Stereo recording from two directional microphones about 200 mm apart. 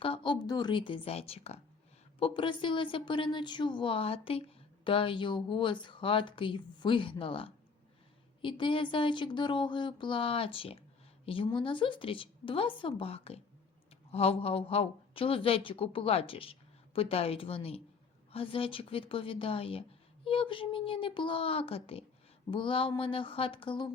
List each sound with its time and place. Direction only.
0.0 s a woman's voice: 25° left (ahead or behind)